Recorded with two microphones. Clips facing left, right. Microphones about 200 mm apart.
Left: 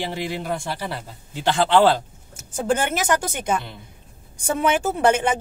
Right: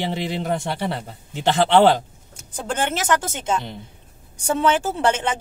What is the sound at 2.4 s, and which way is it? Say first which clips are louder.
Speech: left 3 dB; 10° left (ahead or behind).